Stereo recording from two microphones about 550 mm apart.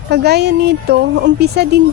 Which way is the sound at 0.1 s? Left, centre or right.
Centre.